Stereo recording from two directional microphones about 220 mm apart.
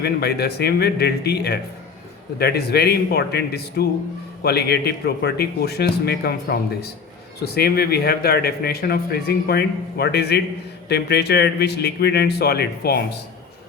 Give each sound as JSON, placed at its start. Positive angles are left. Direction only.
{"t": 0.0, "sound": "a man's voice", "side_deg": 50}